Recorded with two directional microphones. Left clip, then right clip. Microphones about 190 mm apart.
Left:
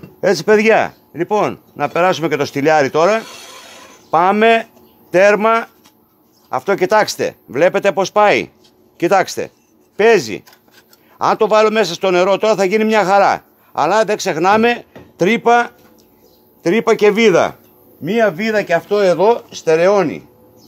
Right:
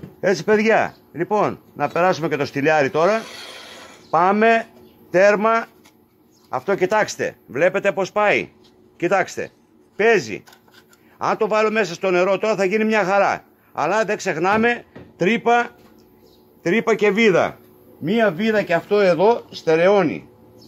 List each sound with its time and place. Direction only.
0.2 s speech: 35° left (ahead or behind)